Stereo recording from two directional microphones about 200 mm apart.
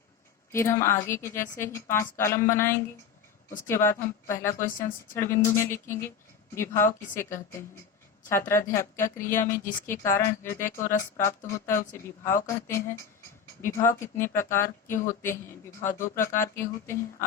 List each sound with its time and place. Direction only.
0.5 s a woman's voice: 15° left (ahead or behind)
4.5 s a woman's voice: 40° left (ahead or behind)
5.1 s a woman's voice: 15° left (ahead or behind)
7.2 s a woman's voice: 15° left (ahead or behind)
14.9 s a woman's voice: 40° left (ahead or behind)
15.3 s a woman's voice: 10° left (ahead or behind)